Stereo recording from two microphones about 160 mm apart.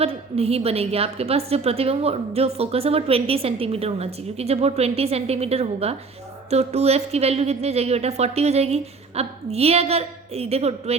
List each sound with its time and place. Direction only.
0.0 s a woman's voice: 40° right (ahead or behind)